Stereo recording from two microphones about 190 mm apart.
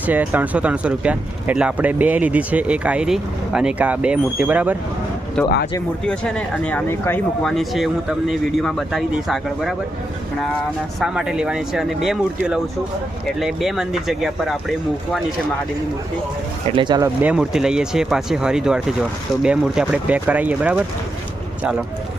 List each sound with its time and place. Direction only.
0.1 s speech: 10° right (ahead or behind)
5.4 s speech: 5° left (ahead or behind)
11.0 s speech: 5° right (ahead or behind)
16.7 s speech: 25° right (ahead or behind)
17.2 s speech: 5° right (ahead or behind)